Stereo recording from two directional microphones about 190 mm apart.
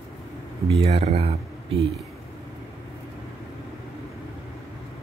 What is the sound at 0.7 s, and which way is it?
Speech, 30° right (ahead or behind).